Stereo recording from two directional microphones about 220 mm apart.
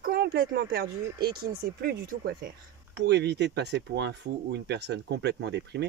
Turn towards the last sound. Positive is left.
turn(degrees=-50)  # may be behind; listen again after turning